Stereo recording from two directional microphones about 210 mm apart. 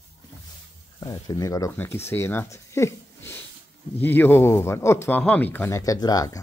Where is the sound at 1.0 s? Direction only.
15° left (ahead or behind).